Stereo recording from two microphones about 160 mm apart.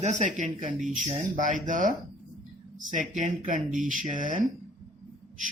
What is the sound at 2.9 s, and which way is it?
Speech, 55° right (ahead or behind).